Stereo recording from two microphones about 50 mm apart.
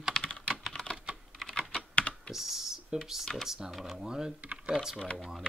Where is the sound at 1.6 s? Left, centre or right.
Left.